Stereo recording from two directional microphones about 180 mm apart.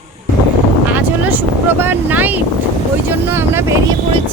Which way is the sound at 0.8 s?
10° right (ahead or behind).